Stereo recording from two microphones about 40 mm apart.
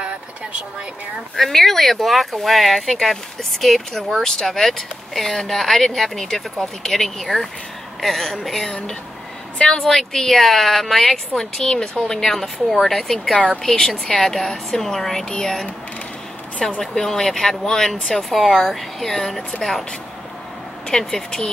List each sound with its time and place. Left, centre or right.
1.3 s speech: centre
9.6 s a woman's voice: left
9.8 s speech: centre
15.2 s speech: centre
16.8 s speech: centre
18.1 s speech: centre
21.0 s speech: centre